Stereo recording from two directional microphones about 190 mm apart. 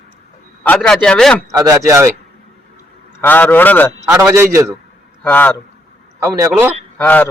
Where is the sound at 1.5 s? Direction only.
15° right (ahead or behind).